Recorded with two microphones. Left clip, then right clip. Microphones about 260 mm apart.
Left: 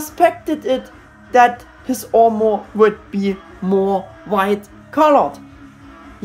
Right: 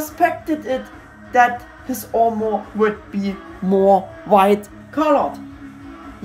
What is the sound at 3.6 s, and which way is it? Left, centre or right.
Speech, centre.